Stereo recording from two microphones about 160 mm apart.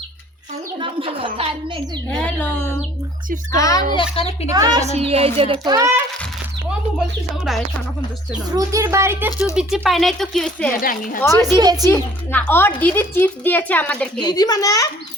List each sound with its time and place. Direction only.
0.8 s speech: 35° right (ahead or behind)
2.0 s a woman's voice: 10° left (ahead or behind); by 4.4 s 35° left (ahead or behind)
4.5 s a woman's voice: 25° right (ahead or behind)
4.9 s speech: 40° right (ahead or behind)
8.5 s a woman's voice: 20° right (ahead or behind)
9.6 s speech: centre (ahead or behind)
10.8 s a woman's voice: 60° left (ahead or behind)
11.2 s a woman's voice: 15° left (ahead or behind)
11.5 s a woman's voice: 25° right (ahead or behind)
11.9 s a woman's voice: 15° left (ahead or behind)
14.2 s a child's voice: 25° left (ahead or behind)